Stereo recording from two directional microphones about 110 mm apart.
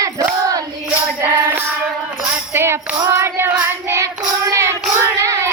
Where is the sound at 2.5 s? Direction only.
20° right (ahead or behind).